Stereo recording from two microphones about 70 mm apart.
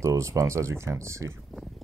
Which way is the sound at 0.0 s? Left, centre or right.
Right.